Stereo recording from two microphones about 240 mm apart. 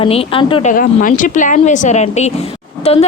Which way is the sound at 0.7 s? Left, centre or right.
Left.